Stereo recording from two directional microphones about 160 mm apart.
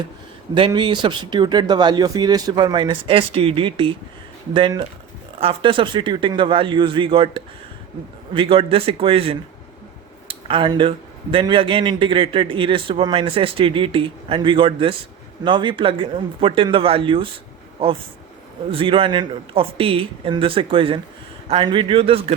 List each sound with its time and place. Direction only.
0.5 s speech: 30° right (ahead or behind)